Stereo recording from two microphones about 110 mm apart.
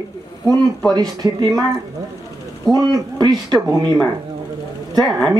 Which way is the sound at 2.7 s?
35° right (ahead or behind).